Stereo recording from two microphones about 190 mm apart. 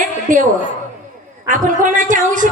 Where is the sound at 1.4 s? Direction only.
45° right (ahead or behind).